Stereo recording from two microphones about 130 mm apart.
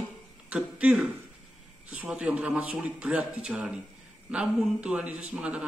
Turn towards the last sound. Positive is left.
turn(degrees=-10)  # may be behind; listen again after turning